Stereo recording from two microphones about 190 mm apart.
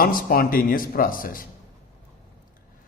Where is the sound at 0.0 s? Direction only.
50° left (ahead or behind).